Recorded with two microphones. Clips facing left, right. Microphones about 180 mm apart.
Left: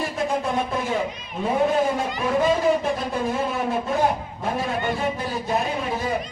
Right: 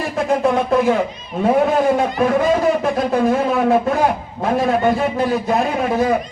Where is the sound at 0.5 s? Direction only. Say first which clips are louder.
Right 9 dB; 70° right (ahead or behind).